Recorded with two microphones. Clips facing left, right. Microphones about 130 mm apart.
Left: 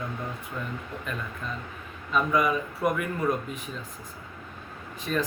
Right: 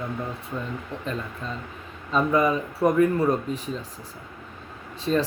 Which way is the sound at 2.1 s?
30° right (ahead or behind).